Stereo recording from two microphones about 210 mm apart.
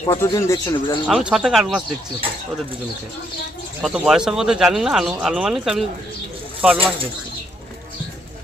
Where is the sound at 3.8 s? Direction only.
5° right (ahead or behind).